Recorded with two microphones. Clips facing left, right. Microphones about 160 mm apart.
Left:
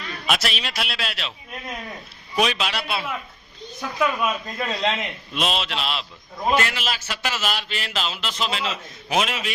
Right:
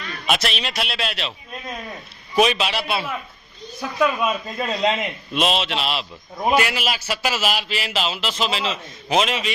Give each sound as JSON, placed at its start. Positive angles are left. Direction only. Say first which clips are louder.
{"t": 0.3, "sound": "a man's voice", "louder": "right 2 dB", "side_deg": 0}
{"t": 2.3, "sound": "a man's voice", "louder": "right 4 dB", "side_deg": 0}